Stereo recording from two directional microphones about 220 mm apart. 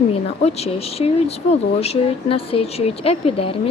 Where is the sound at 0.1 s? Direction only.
30° left (ahead or behind).